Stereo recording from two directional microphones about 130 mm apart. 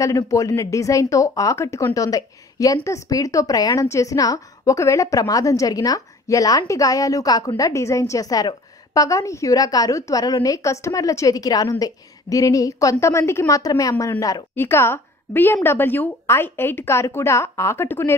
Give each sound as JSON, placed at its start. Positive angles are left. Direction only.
{"t": 0.0, "sound": "a woman's voice", "side_deg": 25}